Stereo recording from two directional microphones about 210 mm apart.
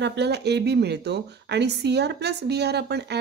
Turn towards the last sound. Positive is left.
turn(degrees=-50)  # may be behind; listen again after turning